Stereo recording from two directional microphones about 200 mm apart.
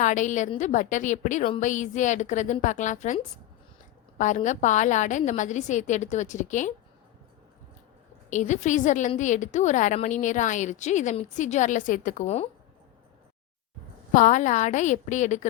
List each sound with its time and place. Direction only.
0.0 s a woman's voice: 40° left (ahead or behind)
4.2 s a woman's voice: 40° left (ahead or behind)
8.3 s a woman's voice: 35° left (ahead or behind)
14.1 s a woman's voice: 40° left (ahead or behind)